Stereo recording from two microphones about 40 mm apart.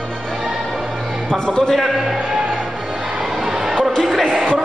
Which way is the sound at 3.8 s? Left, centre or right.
Centre.